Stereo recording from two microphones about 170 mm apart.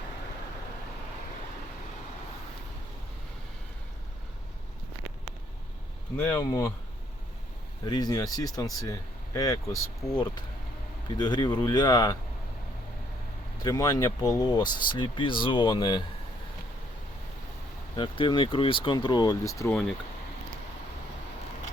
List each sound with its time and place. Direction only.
6.1 s speech: 15° left (ahead or behind)
7.9 s speech: 25° left (ahead or behind)
13.6 s speech: 20° left (ahead or behind)
17.9 s speech: 25° left (ahead or behind)